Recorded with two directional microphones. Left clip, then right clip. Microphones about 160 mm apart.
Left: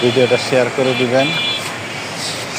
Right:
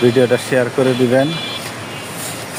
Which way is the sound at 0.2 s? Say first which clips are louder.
Left 1 dB; 45° right (ahead or behind).